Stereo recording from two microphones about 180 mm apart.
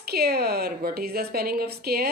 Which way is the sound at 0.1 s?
60° right (ahead or behind).